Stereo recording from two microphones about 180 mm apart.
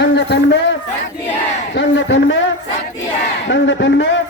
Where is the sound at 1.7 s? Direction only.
90° left.